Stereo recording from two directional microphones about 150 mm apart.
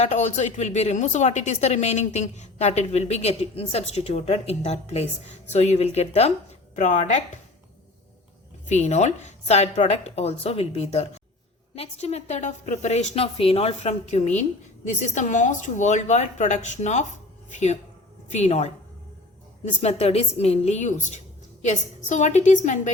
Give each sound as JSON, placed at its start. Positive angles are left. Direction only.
{"t": 0.0, "sound": "a woman's voice", "side_deg": 50}
{"t": 6.7, "sound": "speech", "side_deg": 55}
{"t": 8.6, "sound": "a woman's voice", "side_deg": 50}
{"t": 19.8, "sound": "a woman's voice", "side_deg": 45}